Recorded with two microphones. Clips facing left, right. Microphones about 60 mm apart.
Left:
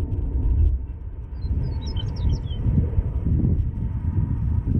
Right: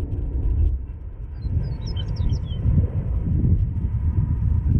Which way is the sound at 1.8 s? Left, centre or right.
Right.